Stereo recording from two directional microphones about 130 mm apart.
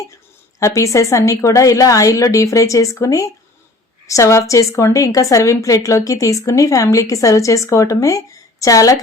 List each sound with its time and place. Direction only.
0.6 s a woman's voice: 25° left (ahead or behind)